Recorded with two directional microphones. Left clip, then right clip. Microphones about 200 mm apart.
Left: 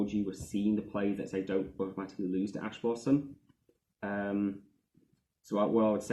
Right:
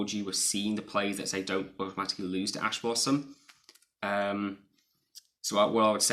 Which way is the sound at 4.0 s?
20° right (ahead or behind).